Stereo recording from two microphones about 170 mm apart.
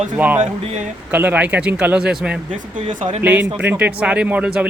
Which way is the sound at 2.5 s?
50° right (ahead or behind).